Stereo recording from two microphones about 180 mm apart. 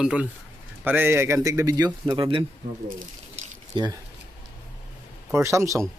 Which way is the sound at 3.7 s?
25° right (ahead or behind).